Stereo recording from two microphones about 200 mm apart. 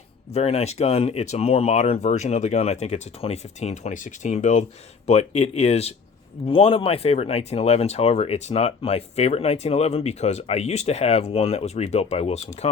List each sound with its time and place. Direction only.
0.3 s speech: 30° left (ahead or behind)